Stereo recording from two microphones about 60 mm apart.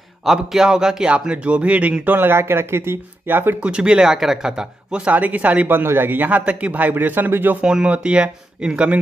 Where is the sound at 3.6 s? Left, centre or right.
Centre; by 7.6 s right.